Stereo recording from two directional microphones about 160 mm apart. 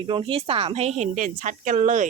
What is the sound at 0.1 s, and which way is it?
Speech, 35° right (ahead or behind).